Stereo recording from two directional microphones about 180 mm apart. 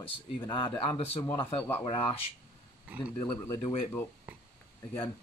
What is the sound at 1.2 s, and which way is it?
Speech, 15° left (ahead or behind).